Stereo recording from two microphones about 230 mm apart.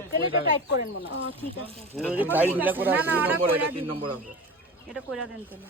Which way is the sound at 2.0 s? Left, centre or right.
Centre.